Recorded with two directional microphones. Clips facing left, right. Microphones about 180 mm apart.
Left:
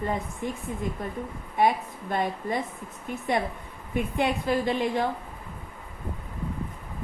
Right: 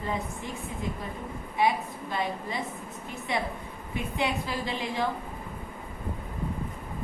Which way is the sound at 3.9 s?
50° left (ahead or behind).